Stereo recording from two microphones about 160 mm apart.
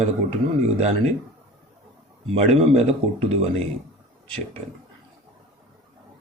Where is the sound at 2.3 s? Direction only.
40° right (ahead or behind).